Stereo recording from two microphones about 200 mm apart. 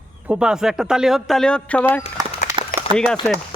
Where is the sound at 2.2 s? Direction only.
20° right (ahead or behind).